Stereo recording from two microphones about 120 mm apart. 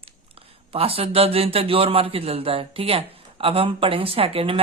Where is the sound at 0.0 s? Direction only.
55° right (ahead or behind).